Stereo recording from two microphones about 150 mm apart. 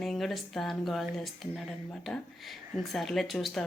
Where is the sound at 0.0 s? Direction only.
Centre (ahead or behind).